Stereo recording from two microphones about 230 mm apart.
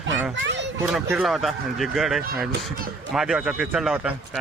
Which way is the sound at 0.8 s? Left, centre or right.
Centre.